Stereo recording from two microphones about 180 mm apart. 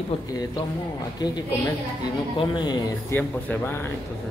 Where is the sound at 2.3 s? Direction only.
25° left (ahead or behind).